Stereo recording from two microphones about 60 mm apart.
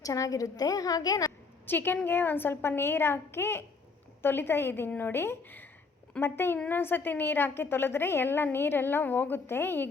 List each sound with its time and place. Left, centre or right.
0.0 s a woman's voice: left
1.6 s a woman's voice: left